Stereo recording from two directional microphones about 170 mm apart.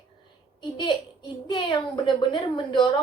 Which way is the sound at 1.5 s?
25° left (ahead or behind).